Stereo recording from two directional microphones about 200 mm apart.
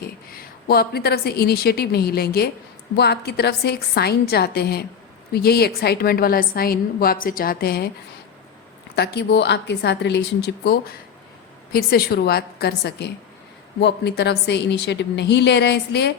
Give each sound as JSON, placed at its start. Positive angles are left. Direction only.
{"t": 0.0, "sound": "a woman's voice", "side_deg": 50}
{"t": 9.0, "sound": "a woman's voice", "side_deg": 55}